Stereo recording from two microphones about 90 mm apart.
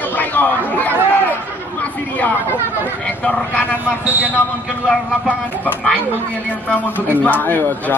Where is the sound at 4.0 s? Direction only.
15° right (ahead or behind).